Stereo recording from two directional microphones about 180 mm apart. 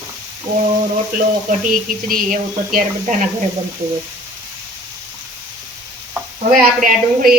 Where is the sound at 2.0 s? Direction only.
50° right (ahead or behind).